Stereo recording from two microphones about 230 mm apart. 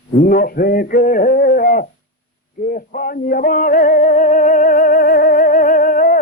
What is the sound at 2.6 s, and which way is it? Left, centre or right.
Music, left.